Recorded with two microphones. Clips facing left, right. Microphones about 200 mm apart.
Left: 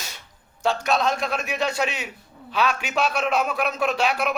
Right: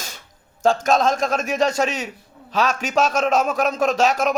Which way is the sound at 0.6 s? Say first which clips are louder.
Right 5 dB; 45° right (ahead or behind).